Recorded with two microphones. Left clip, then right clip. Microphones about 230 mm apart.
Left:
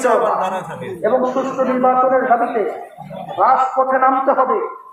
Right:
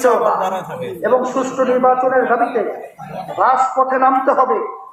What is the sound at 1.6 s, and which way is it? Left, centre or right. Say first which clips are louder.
Speech: right 3 dB; right.